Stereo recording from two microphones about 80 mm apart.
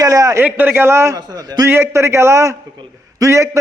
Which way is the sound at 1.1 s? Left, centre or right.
Right.